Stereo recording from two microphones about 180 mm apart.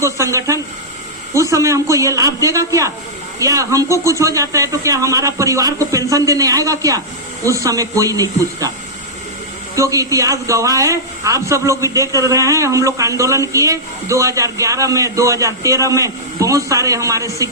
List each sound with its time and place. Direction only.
0.0 s a man's voice: 15° right (ahead or behind)
9.7 s a man's voice: 20° right (ahead or behind)